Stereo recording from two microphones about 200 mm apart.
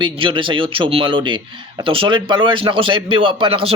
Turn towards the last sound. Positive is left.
turn(degrees=-25)  # may be behind; listen again after turning